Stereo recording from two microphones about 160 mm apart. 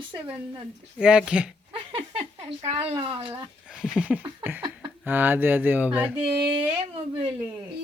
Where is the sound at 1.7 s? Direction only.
35° right (ahead or behind).